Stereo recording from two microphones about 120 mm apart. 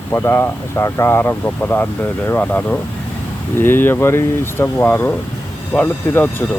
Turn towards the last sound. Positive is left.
turn(degrees=15)  # may be behind; listen again after turning